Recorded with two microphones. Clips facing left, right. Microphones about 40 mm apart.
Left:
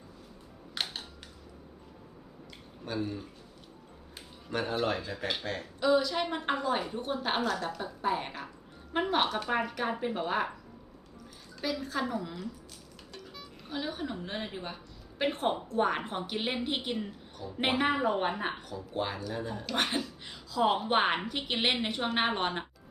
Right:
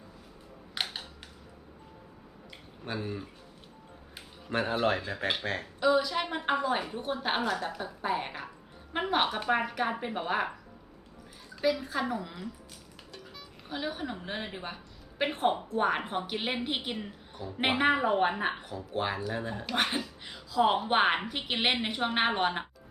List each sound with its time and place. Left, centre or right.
0.7 s a sound: centre
2.8 s speech: right
4.5 s speech: right
4.9 s speech: right
5.8 s a woman's voice: centre
11.6 s a woman's voice: centre
18.7 s speech: right
19.7 s a woman's voice: centre